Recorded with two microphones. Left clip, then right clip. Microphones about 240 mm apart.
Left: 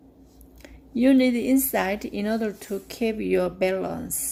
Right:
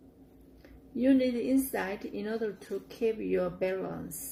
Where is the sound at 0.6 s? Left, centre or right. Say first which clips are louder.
Left 7 dB; left.